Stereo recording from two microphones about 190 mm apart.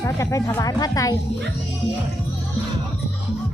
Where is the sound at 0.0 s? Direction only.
15° left (ahead or behind).